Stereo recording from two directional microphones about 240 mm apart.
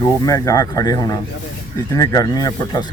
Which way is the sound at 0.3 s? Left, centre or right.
Centre.